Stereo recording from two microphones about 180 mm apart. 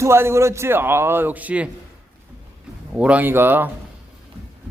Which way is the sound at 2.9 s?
5° right (ahead or behind).